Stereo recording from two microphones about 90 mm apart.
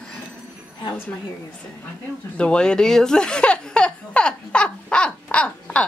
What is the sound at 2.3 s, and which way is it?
Speech, 10° left (ahead or behind).